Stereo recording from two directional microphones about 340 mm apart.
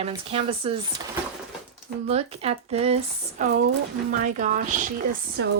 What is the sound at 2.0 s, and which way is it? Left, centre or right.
Speech, centre.